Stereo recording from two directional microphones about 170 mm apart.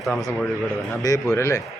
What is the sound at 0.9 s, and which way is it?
Speech, 20° left (ahead or behind).